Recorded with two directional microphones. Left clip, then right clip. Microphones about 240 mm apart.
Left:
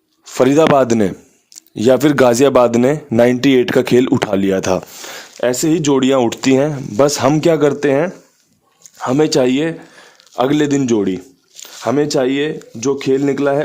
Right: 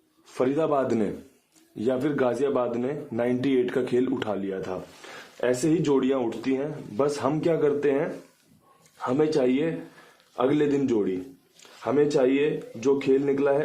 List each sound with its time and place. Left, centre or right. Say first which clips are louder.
0.3 s speech: left 13 dB; left